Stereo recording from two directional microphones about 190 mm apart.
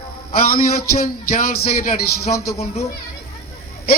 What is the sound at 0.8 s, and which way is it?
A man's voice, 50° left (ahead or behind).